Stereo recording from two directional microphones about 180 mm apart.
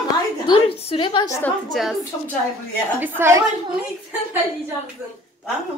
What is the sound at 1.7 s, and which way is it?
Speech, centre (ahead or behind).